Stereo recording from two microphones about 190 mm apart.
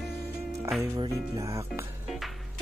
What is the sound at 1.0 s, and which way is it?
Speech, 15° right (ahead or behind).